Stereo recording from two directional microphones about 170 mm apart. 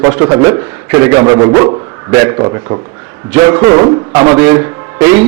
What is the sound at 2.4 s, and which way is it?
A man's voice, 30° right (ahead or behind).